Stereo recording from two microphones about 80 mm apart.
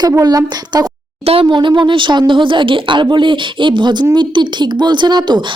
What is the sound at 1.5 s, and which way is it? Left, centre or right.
Speech, right.